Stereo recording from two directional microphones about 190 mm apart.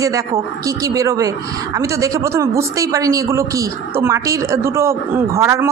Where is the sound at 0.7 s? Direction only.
20° right (ahead or behind).